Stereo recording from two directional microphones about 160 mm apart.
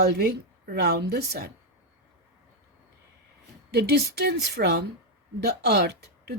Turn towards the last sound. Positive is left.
turn(degrees=-90)